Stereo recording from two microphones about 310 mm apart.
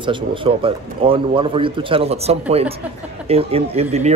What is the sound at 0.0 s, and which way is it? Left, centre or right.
Speech, centre.